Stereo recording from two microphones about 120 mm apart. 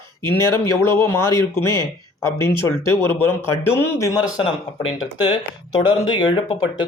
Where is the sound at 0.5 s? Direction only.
20° left (ahead or behind).